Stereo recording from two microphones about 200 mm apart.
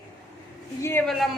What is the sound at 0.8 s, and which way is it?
Speech, 10° left (ahead or behind).